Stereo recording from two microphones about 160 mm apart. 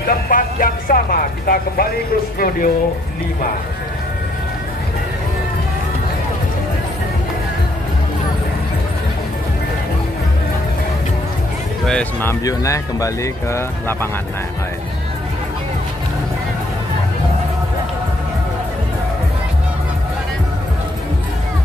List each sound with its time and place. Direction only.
0.0 s speech: 65° left (ahead or behind)
11.8 s speech: 5° left (ahead or behind)